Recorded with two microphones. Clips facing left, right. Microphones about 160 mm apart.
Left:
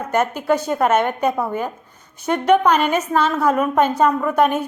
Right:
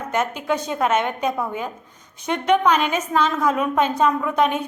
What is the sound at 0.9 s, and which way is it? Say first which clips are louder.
Speech: left 3 dB; 55° left (ahead or behind).